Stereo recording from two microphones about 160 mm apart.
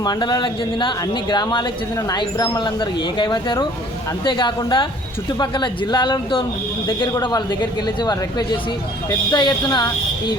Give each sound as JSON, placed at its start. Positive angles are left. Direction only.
{"t": 0.0, "sound": "speech", "side_deg": 25}